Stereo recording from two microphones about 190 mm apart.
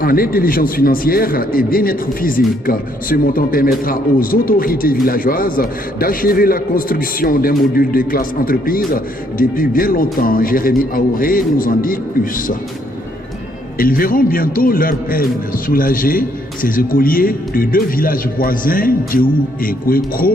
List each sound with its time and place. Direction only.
0.0 s a man's voice: 50° left (ahead or behind)
13.7 s a man's voice: 50° left (ahead or behind)